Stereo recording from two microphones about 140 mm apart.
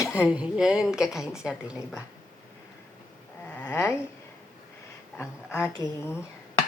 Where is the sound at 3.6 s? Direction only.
20° left (ahead or behind).